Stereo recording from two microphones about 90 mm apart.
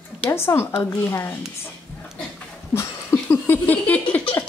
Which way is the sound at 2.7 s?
30° left (ahead or behind).